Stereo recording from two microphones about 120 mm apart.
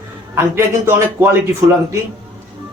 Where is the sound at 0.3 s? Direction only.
20° right (ahead or behind).